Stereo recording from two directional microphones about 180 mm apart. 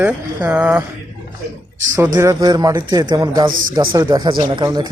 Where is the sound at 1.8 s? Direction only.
15° right (ahead or behind).